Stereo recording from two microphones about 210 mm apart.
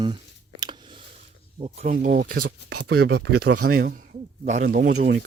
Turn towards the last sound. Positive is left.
turn(degrees=-40)  # may be behind; listen again after turning